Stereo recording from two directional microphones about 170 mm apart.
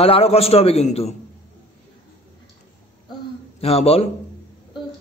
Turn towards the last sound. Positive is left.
turn(degrees=35)  # may be behind; listen again after turning